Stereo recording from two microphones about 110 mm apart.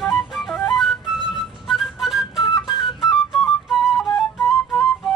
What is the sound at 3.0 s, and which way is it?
Flute, centre (ahead or behind).